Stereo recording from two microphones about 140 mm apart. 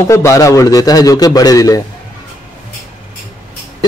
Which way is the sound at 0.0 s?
20° left (ahead or behind).